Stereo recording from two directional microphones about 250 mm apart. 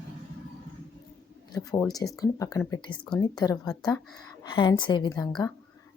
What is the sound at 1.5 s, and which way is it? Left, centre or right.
Speech, centre.